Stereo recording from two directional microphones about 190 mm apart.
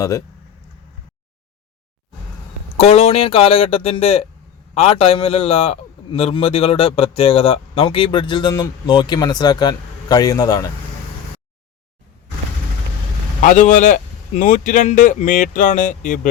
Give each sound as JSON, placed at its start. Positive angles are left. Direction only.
{"t": 2.7, "sound": "a man's voice", "side_deg": 35}
{"t": 13.4, "sound": "speech", "side_deg": 40}